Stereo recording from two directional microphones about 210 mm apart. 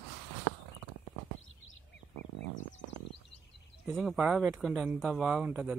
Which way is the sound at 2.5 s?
65° left (ahead or behind).